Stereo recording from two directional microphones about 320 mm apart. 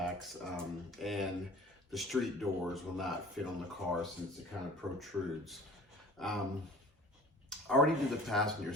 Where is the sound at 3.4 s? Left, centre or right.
Centre.